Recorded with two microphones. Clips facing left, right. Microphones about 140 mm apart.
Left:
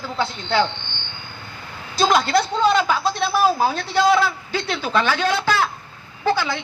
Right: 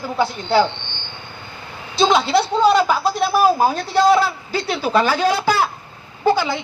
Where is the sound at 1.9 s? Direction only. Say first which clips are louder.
Right 2 dB; centre (ahead or behind).